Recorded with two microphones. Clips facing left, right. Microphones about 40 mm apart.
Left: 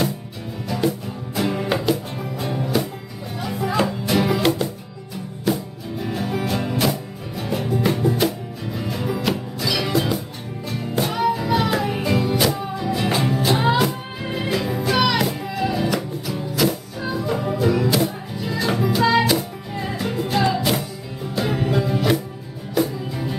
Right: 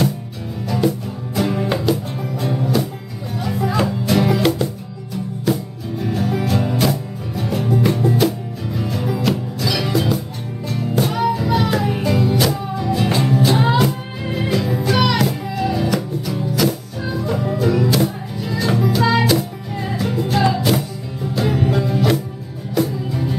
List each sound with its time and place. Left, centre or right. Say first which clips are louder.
0.7 s music: right 3 dB; centre